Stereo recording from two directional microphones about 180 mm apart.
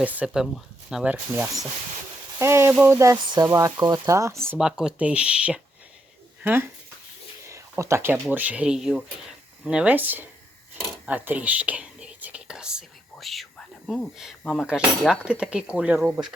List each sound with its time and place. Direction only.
0.0 s speech: 10° right (ahead or behind)
4.4 s speech: 5° right (ahead or behind)